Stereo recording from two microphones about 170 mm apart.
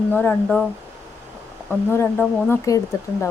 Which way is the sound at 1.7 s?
10° left (ahead or behind).